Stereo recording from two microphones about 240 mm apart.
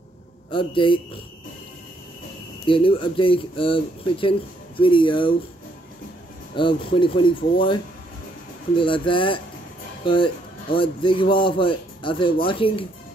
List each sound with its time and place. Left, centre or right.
0.5 s speech: left
2.6 s speech: left
6.5 s speech: left